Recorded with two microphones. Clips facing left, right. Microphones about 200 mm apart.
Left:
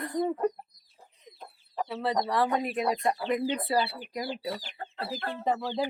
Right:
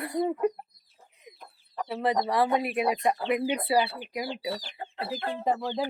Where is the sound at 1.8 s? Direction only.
15° right (ahead or behind).